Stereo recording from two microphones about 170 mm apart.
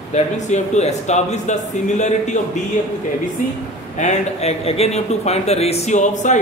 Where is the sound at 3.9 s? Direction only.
40° left (ahead or behind).